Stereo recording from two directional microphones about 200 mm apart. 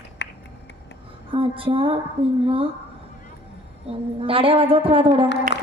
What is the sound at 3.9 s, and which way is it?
A woman's voice, 30° right (ahead or behind).